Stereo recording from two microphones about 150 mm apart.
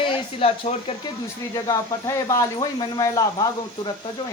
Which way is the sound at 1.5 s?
25° left (ahead or behind).